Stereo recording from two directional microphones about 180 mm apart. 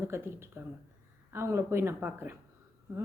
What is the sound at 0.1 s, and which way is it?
Speech, 15° right (ahead or behind).